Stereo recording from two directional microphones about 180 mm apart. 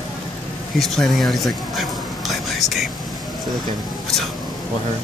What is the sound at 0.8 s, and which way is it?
Speech, centre (ahead or behind).